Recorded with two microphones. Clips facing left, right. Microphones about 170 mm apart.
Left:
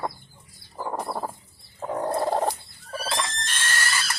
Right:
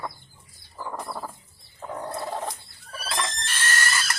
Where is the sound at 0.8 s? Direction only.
35° left (ahead or behind).